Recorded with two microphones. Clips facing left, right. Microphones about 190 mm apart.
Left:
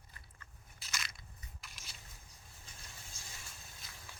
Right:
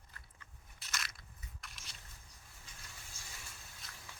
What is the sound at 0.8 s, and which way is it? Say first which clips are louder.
Biting: right 1 dB; centre (ahead or behind).